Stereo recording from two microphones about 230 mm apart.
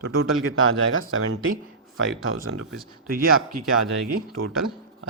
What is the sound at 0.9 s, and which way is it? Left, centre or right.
Speech, right.